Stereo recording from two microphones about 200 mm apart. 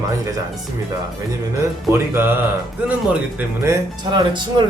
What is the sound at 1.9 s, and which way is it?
Speech, 10° right (ahead or behind).